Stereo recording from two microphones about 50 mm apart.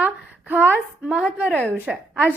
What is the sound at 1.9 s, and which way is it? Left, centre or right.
Speech, centre.